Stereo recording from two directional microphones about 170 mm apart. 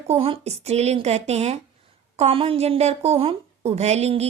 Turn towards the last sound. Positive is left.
turn(degrees=-40)  # may be behind; listen again after turning